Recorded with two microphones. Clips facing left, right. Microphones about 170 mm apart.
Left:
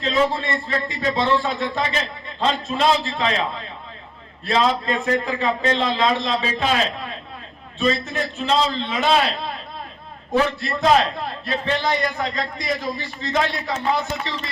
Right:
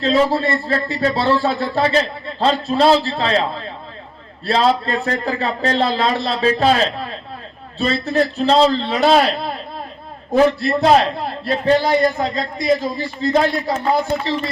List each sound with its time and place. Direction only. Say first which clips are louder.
0.0 s a man's voice: right 5 dB; 35° right (ahead or behind)